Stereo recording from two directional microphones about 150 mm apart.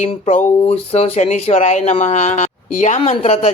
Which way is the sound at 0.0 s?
50° left (ahead or behind).